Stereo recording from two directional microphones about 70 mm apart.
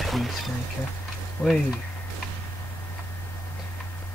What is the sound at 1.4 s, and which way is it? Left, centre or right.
Speech, left.